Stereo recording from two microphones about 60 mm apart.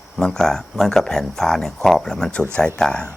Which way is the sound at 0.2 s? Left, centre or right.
Centre.